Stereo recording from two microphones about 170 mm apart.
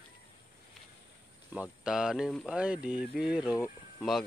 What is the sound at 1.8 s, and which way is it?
Speech, 5° right (ahead or behind).